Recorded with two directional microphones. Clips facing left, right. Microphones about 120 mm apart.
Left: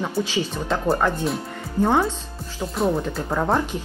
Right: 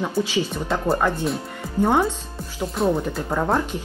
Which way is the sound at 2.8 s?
Centre (ahead or behind).